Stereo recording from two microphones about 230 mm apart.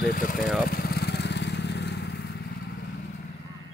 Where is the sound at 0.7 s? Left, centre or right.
Left.